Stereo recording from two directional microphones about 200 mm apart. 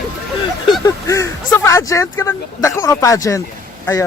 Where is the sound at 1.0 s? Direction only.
15° left (ahead or behind).